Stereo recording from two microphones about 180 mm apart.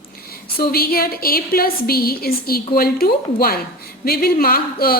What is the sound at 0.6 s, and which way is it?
A woman's voice, 55° left (ahead or behind).